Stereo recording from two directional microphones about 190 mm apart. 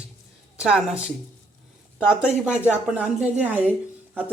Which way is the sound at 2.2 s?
5° right (ahead or behind).